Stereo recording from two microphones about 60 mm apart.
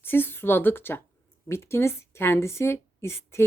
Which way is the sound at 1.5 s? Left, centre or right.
Left.